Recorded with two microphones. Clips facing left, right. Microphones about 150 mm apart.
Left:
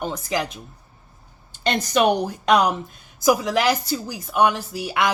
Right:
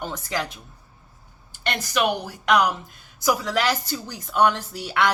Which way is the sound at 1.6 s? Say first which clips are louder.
Left 5 dB; 20° left (ahead or behind).